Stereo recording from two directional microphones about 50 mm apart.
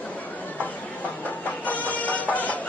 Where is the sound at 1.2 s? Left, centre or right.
Left.